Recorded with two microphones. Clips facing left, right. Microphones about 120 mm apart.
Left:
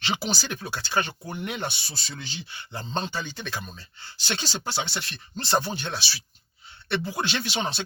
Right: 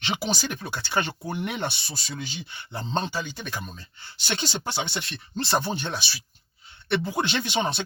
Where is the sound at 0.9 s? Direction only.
25° right (ahead or behind).